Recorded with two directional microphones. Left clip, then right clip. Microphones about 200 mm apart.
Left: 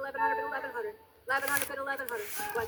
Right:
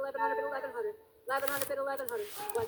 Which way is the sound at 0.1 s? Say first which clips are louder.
Left 5 dB; 30° left (ahead or behind).